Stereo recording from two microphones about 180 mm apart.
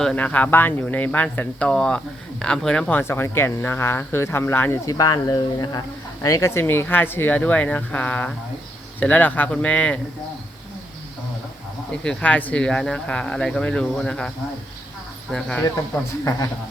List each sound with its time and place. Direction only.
0.0 s speech: 5° left (ahead or behind)
11.9 s speech: 5° left (ahead or behind)